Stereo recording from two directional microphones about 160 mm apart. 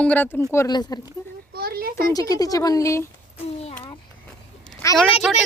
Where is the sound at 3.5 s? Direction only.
40° left (ahead or behind).